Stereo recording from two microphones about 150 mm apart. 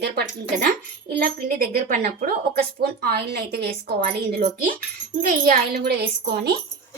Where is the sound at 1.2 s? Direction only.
75° right (ahead or behind); by 2.3 s 55° right (ahead or behind).